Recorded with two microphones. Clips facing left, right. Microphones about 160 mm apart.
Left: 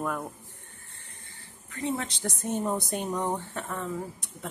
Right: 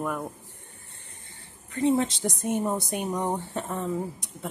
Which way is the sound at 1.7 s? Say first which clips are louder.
Right 8 dB; 25° right (ahead or behind).